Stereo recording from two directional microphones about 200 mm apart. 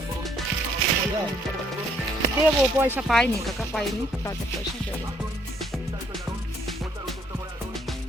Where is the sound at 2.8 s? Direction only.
10° right (ahead or behind).